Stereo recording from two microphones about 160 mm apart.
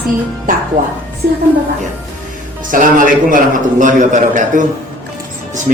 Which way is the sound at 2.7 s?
60° right (ahead or behind).